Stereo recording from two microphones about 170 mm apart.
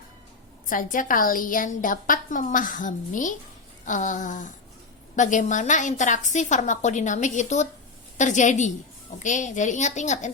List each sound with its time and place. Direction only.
0.7 s a woman's voice: 50° left (ahead or behind)